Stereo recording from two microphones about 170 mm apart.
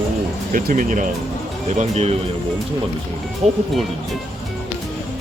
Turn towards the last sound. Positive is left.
turn(degrees=-40)  # may be behind; listen again after turning